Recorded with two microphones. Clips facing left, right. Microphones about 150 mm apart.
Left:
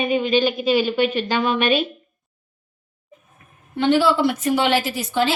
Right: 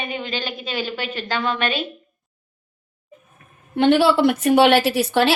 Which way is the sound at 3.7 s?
60° right (ahead or behind).